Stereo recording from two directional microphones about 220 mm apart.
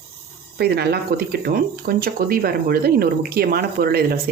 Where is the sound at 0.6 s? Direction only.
45° right (ahead or behind).